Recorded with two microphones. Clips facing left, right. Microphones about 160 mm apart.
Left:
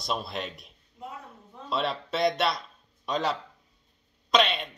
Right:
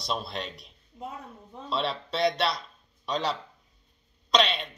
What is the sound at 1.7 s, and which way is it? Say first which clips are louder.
Speech: left 1 dB; 50° left (ahead or behind).